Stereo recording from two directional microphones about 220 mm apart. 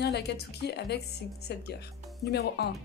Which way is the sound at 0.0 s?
50° left (ahead or behind).